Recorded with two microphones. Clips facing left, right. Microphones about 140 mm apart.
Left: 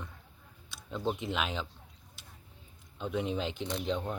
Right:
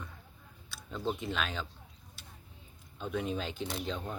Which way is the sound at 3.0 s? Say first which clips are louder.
Left 2 dB; 20° left (ahead or behind).